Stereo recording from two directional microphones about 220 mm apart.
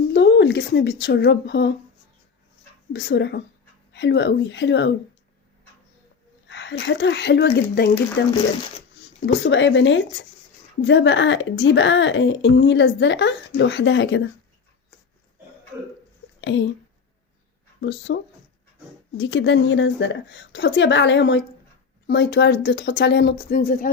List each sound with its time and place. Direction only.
0.1 s speech: 55° left (ahead or behind)
2.9 s a woman's voice: 50° left (ahead or behind)
6.5 s a woman's voice: 55° left (ahead or behind)
9.4 s speech: 55° left (ahead or behind)
16.4 s speech: 55° left (ahead or behind)
17.7 s speech: 55° left (ahead or behind)
19.2 s a woman's voice: 55° left (ahead or behind); by 23.9 s 40° left (ahead or behind)